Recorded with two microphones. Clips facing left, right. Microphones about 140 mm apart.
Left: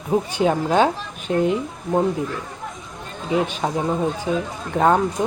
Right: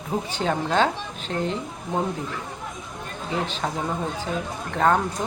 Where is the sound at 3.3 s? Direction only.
10° left (ahead or behind).